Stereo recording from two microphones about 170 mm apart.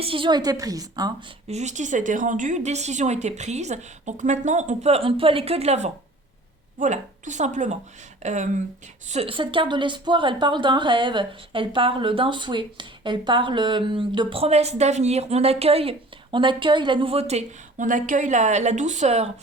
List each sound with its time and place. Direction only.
0.0 s a woman's voice: 30° right (ahead or behind)
1.5 s speech: 45° right (ahead or behind)